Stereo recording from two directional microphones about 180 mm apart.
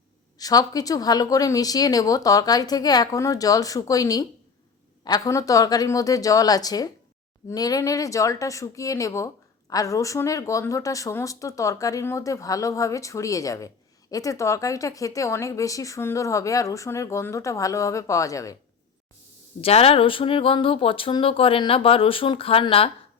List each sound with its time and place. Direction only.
0.3 s speech: 20° left (ahead or behind)
19.6 s speech: 35° left (ahead or behind)